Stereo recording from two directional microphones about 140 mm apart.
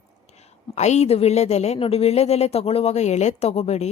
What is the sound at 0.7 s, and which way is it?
A woman's voice, 55° left (ahead or behind).